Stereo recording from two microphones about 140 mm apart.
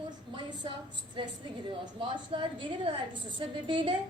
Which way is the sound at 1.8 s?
35° right (ahead or behind).